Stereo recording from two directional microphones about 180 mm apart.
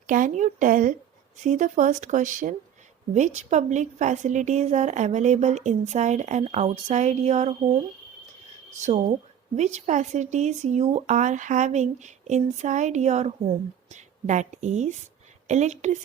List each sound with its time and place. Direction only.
0.1 s speech: 45° right (ahead or behind)
9.6 s speech: 40° right (ahead or behind)